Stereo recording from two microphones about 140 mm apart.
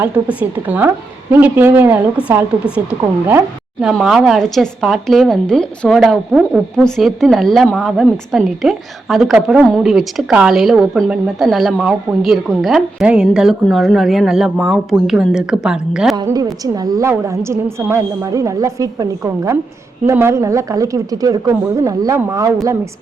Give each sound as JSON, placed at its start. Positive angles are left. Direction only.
{"t": 0.0, "sound": "a woman's voice", "side_deg": -10}
{"t": 16.1, "sound": "a woman's voice", "side_deg": -25}